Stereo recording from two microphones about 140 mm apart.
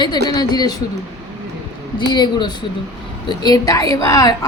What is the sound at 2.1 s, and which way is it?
A woman's voice, 30° left (ahead or behind).